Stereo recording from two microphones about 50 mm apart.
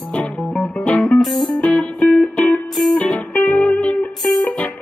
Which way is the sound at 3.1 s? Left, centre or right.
Left.